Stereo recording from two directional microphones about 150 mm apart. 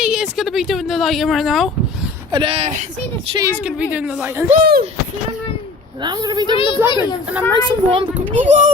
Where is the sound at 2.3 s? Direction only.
35° right (ahead or behind).